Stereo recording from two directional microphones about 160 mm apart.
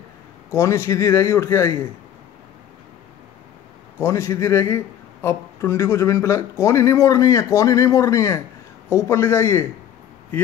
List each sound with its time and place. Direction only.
0.5 s a man's voice: 20° left (ahead or behind)
4.0 s a man's voice: 15° left (ahead or behind)